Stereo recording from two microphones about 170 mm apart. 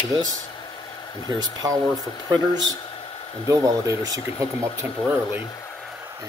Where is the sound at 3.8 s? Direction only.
20° right (ahead or behind).